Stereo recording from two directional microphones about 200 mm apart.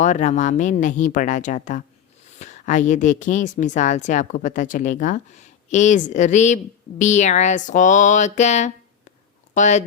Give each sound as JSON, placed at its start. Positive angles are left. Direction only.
{"t": 0.0, "sound": "speech", "side_deg": 35}